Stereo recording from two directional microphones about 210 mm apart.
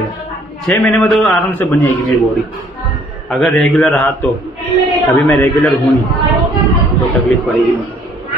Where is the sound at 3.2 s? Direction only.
Centre (ahead or behind).